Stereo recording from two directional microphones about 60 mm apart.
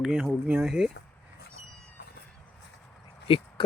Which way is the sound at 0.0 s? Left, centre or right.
Centre.